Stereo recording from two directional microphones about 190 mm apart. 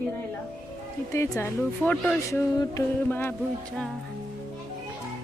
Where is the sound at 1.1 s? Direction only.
15° left (ahead or behind).